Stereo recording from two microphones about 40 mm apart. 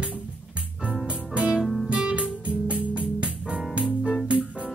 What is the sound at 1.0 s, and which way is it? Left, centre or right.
Music, right.